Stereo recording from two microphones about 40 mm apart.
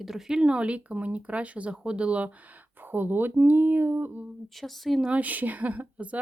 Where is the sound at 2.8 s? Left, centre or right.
Right.